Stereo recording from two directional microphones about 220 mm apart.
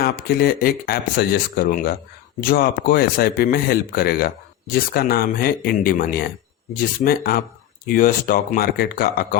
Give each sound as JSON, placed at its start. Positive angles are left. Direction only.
{"t": 0.0, "sound": "speech", "side_deg": 45}